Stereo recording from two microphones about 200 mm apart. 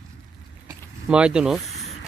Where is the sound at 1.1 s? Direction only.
5° right (ahead or behind).